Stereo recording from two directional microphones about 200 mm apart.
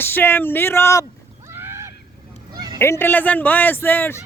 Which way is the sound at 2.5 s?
20° right (ahead or behind).